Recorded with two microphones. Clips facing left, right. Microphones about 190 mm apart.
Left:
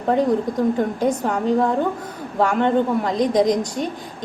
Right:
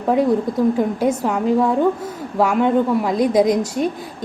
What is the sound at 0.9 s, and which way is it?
A woman's voice, 5° right (ahead or behind).